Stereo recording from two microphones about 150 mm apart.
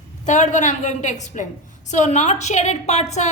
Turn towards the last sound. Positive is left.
turn(degrees=50)  # may be behind; listen again after turning